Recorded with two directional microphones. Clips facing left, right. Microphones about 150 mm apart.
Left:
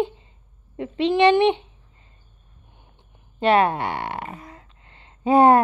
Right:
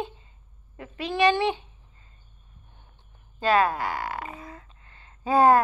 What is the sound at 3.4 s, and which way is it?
Speech, 25° left (ahead or behind).